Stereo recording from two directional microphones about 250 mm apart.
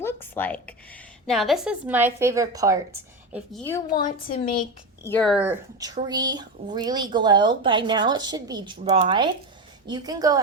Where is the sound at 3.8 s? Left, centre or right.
Left.